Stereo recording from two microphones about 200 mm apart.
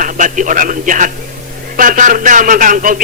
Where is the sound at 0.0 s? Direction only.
40° right (ahead or behind).